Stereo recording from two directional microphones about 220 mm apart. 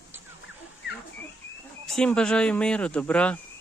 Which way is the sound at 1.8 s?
5° left (ahead or behind).